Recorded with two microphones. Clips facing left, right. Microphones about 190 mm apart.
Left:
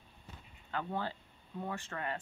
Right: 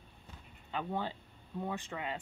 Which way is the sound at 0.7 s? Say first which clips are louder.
Right 1 dB; 20° right (ahead or behind).